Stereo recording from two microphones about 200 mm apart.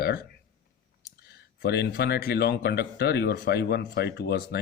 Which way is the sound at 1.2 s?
55° left (ahead or behind).